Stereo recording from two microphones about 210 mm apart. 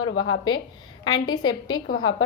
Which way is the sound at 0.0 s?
75° left (ahead or behind).